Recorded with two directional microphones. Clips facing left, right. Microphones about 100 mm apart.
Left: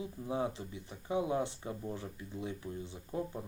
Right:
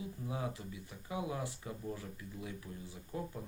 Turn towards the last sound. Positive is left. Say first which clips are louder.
# left 4 dB
turn(degrees=25)  # may be behind; listen again after turning